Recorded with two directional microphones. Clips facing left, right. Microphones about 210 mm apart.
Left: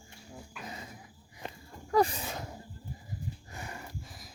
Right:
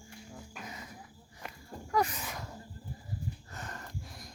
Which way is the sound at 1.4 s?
30° left (ahead or behind).